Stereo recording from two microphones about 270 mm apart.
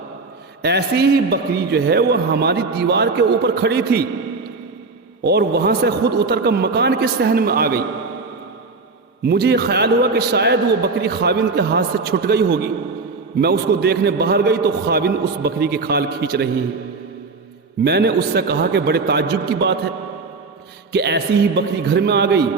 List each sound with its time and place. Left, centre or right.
0.6 s a man's voice: right
5.2 s a man's voice: right
9.2 s a man's voice: right
17.8 s a man's voice: right
20.9 s a man's voice: right